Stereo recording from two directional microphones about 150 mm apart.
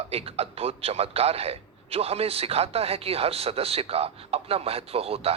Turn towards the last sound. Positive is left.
turn(degrees=-40)  # may be behind; listen again after turning